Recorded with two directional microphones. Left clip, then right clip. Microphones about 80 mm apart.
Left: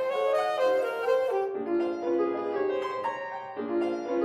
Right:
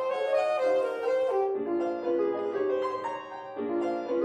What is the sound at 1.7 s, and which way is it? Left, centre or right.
Music, right.